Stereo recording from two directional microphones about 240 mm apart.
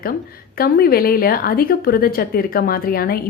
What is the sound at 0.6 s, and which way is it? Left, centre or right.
A woman's voice, left.